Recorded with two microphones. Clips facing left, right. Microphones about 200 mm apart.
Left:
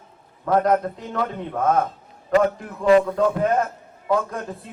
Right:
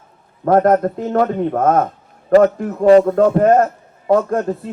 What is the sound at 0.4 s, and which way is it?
A man's voice, 50° right (ahead or behind).